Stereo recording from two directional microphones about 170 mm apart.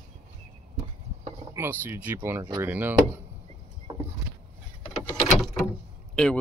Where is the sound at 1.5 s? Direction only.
15° right (ahead or behind).